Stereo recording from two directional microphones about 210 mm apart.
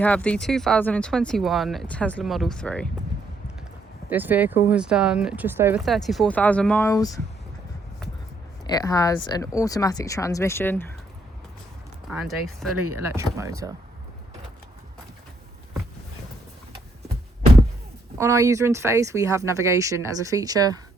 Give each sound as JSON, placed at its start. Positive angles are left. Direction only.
{"t": 0.0, "sound": "speech", "side_deg": 5}
{"t": 4.1, "sound": "speech", "side_deg": -10}
{"t": 5.8, "sound": "speech", "side_deg": 0}
{"t": 8.6, "sound": "speech", "side_deg": 20}
{"t": 12.0, "sound": "speech", "side_deg": 0}
{"t": 12.9, "sound": "speech", "side_deg": -10}
{"t": 18.2, "sound": "speech", "side_deg": -15}